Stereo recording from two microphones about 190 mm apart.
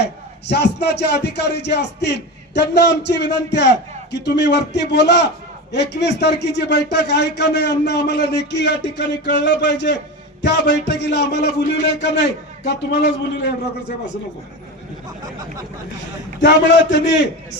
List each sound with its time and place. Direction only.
0.0 s speech: 60° left (ahead or behind)
16.4 s a man's voice: 65° left (ahead or behind)